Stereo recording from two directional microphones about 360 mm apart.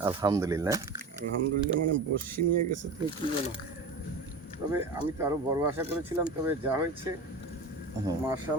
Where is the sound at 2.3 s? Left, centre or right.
Right.